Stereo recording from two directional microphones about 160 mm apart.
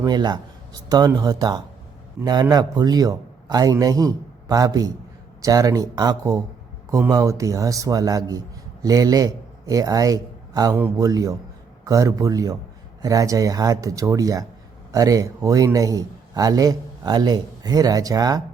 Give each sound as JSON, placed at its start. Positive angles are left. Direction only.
{"t": 0.0, "sound": "a man's voice", "side_deg": -25}